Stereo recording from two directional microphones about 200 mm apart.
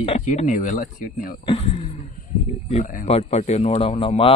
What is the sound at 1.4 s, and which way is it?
A man's voice, 30° left (ahead or behind).